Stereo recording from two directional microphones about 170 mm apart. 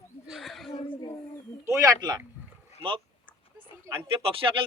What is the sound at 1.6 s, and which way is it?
Speech, 20° right (ahead or behind).